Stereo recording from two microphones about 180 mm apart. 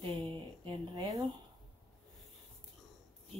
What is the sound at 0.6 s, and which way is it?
Speech, 20° right (ahead or behind).